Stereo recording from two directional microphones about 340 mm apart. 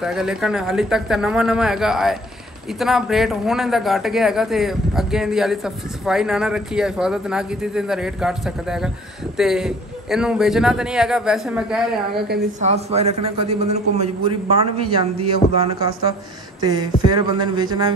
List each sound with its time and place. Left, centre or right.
0.0 s a man's voice: centre
12.3 s a man's voice: right
16.6 s a man's voice: centre